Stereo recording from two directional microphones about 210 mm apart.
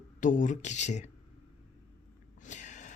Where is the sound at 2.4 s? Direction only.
35° left (ahead or behind).